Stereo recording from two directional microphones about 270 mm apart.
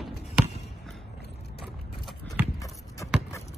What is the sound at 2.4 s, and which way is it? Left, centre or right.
Horse, centre.